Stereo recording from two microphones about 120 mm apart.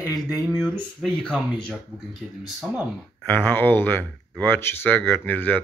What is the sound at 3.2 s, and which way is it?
Speech, 15° left (ahead or behind).